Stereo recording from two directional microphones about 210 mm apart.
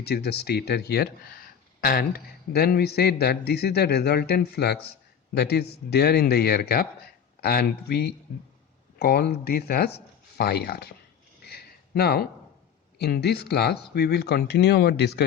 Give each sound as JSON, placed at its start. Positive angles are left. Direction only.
{"t": 0.0, "sound": "speech", "side_deg": 50}
{"t": 11.4, "sound": "a sound", "side_deg": 50}
{"t": 13.0, "sound": "speech", "side_deg": 50}